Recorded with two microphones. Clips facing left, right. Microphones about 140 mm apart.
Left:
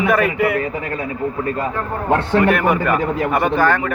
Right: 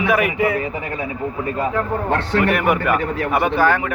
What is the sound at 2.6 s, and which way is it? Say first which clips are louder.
Speech: left 1 dB; 10° right (ahead or behind).